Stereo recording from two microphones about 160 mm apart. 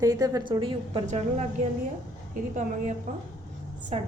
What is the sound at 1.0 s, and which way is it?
A woman's voice, 45° right (ahead or behind).